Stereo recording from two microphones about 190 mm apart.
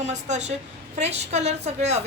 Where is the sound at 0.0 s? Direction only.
35° right (ahead or behind).